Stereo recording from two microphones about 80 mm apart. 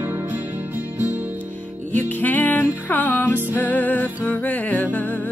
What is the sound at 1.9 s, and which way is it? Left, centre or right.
Music, left.